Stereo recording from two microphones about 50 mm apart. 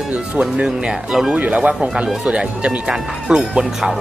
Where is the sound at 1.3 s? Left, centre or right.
Right.